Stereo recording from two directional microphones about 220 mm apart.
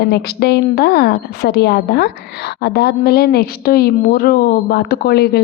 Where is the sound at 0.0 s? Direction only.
45° left (ahead or behind).